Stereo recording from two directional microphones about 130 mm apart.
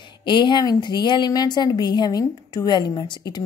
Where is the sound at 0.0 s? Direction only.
35° left (ahead or behind).